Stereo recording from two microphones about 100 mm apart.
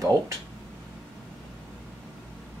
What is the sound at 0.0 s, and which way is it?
Speech, 35° right (ahead or behind).